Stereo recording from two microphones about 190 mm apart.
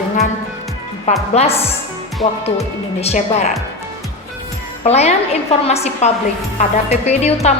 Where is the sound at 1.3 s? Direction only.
35° left (ahead or behind).